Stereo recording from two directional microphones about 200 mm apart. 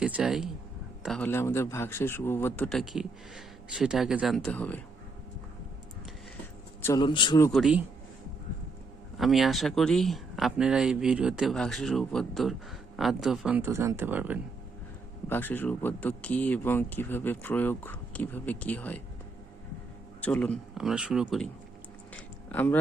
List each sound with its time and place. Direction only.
0.0 s a man's voice: 5° right (ahead or behind)
6.8 s a man's voice: 20° left (ahead or behind)
7.5 s speech: 5° right (ahead or behind)
9.1 s speech: centre (ahead or behind)
15.3 s a man's voice: 10° left (ahead or behind)
20.2 s speech: 5° left (ahead or behind)
22.1 s a sound: 10° left (ahead or behind)